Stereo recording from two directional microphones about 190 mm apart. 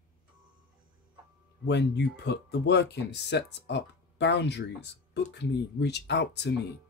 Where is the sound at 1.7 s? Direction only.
65° left (ahead or behind).